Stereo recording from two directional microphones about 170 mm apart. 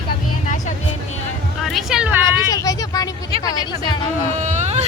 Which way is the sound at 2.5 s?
20° left (ahead or behind).